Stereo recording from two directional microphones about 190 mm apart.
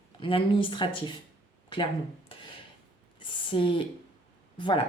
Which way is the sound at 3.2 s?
25° left (ahead or behind).